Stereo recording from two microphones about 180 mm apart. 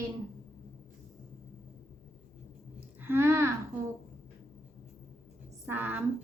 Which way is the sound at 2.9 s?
10° right (ahead or behind).